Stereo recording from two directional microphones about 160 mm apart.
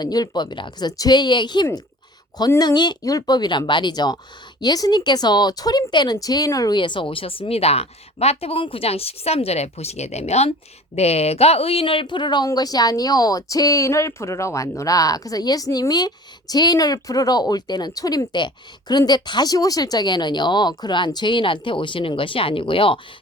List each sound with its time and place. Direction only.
0.0 s speech: 25° left (ahead or behind)